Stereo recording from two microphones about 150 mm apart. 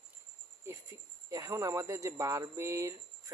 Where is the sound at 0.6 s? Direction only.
20° right (ahead or behind).